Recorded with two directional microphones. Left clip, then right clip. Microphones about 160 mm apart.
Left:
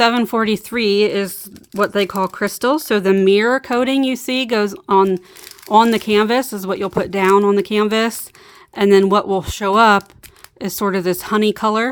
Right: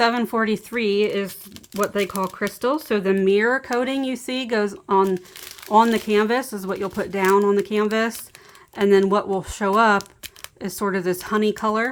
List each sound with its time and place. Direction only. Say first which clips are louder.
0.0 s speech: left 5 dB; 45° left (ahead or behind)